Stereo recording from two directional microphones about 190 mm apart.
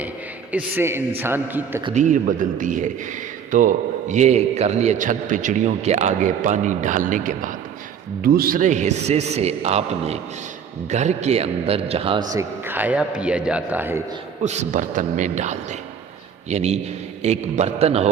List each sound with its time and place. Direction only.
0.5 s a man's voice: 10° right (ahead or behind)
2.0 s a man's voice: 40° right (ahead or behind); by 14.0 s 10° right (ahead or behind)
14.4 s a man's voice: 35° right (ahead or behind)